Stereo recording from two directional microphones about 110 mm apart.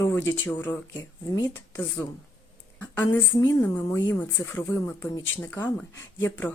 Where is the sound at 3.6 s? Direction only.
20° left (ahead or behind).